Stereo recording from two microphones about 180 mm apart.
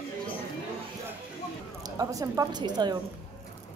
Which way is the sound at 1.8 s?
20° right (ahead or behind).